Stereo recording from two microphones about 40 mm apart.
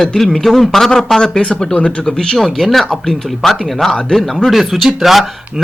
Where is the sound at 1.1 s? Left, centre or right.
Centre.